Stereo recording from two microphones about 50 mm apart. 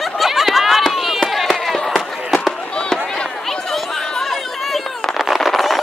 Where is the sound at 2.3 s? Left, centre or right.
Centre.